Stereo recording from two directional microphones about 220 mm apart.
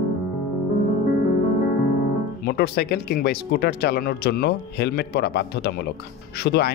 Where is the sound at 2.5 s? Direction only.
45° left (ahead or behind).